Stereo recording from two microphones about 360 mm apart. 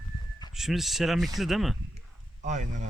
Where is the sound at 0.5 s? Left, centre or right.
Centre.